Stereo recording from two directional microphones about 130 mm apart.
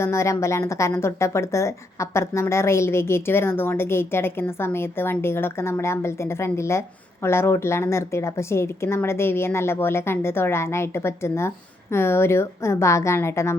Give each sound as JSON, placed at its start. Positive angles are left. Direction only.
{"t": 0.0, "sound": "speech", "side_deg": 20}